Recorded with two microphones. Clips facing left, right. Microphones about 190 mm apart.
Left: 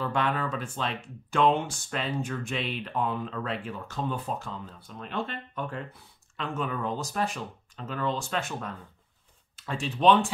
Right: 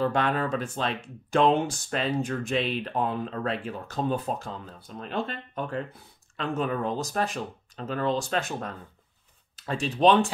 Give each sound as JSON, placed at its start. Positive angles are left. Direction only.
{"t": 0.0, "sound": "speech", "side_deg": -40}